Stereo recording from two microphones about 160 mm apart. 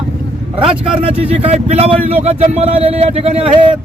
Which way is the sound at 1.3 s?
40° right (ahead or behind).